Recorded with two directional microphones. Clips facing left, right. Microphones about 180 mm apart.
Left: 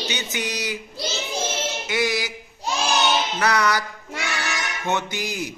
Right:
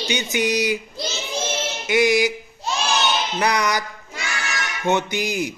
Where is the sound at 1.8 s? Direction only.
15° right (ahead or behind).